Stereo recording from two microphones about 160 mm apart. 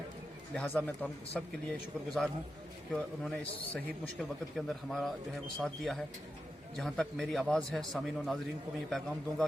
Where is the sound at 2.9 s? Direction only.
5° left (ahead or behind).